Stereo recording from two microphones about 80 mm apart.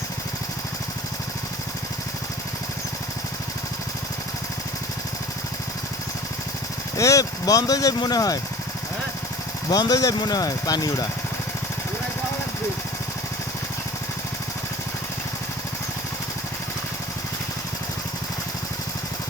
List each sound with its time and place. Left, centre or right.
6.9 s speech: left
9.6 s speech: left